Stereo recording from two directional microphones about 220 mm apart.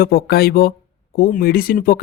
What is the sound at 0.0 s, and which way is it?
Speech, 45° left (ahead or behind).